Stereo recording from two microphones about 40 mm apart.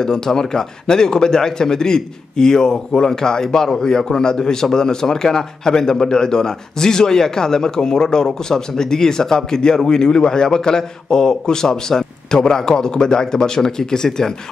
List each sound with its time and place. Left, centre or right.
0.0 s a man's voice: centre